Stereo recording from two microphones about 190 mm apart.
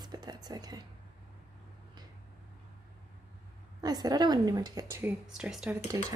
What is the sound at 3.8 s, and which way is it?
Speech, 20° right (ahead or behind).